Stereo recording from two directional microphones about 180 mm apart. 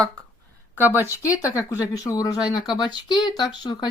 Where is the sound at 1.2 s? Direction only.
15° left (ahead or behind).